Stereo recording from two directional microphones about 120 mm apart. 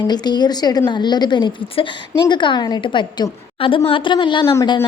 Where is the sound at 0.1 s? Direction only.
35° left (ahead or behind).